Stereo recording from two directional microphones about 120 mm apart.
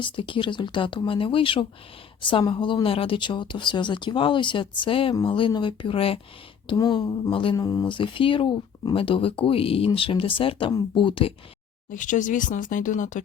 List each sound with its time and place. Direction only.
0.0 s speech: 45° left (ahead or behind)
6.7 s speech: 30° left (ahead or behind)
7.5 s speech: 30° left (ahead or behind)
7.9 s speech: 45° left (ahead or behind)
11.9 s speech: 90° left